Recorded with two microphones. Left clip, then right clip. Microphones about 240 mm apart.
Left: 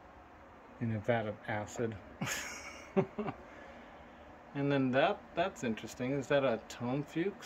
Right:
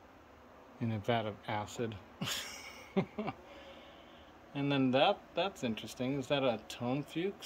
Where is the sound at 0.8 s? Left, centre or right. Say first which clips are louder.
Left 1 dB; centre.